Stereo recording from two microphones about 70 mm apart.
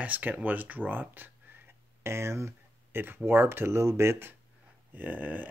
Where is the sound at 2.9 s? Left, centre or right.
Right.